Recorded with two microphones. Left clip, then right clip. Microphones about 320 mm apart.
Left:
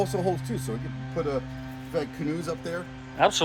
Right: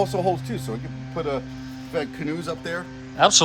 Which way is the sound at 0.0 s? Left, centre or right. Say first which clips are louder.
Right 5 dB; centre.